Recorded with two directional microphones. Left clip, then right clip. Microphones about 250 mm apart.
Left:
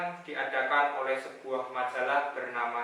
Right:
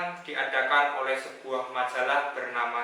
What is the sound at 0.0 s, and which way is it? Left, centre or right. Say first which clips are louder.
A man's voice: right 3 dB; centre.